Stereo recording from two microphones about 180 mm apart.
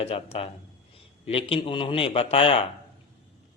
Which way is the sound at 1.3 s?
30° left (ahead or behind).